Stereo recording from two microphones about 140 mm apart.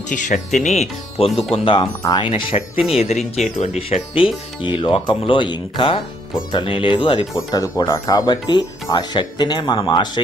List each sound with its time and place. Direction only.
0.1 s speech: 65° left (ahead or behind)
0.6 s speech: 50° left (ahead or behind); by 2.2 s 30° left (ahead or behind)
2.3 s speech: 40° left (ahead or behind)
7.3 s speech: 25° left (ahead or behind)